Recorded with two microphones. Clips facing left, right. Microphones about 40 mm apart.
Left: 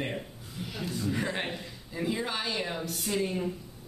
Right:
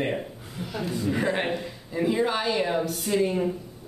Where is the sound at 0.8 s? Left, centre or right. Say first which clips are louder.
Right 6 dB; centre.